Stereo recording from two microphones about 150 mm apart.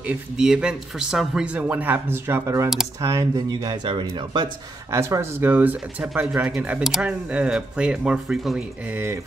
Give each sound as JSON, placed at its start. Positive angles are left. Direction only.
{"t": 0.0, "sound": "speech", "side_deg": -5}
{"t": 4.9, "sound": "speech", "side_deg": -20}